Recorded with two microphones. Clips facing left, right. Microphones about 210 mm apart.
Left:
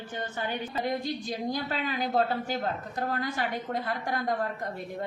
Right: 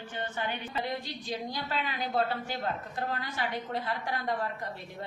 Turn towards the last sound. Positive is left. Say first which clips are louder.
# left 3 dB
turn(degrees=45)  # may be behind; listen again after turning